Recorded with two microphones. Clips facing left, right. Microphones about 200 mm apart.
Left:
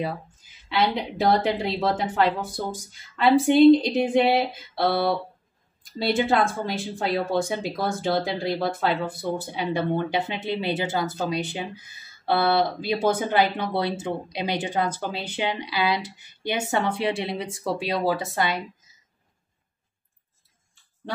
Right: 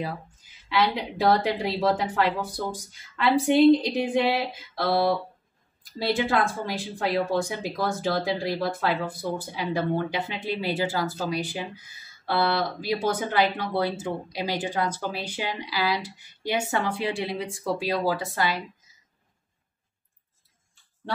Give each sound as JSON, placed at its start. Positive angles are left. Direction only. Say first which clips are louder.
{"t": 0.7, "sound": "speech", "louder": "left 1 dB", "side_deg": 25}
{"t": 5.9, "sound": "speech", "louder": "left 2 dB", "side_deg": 25}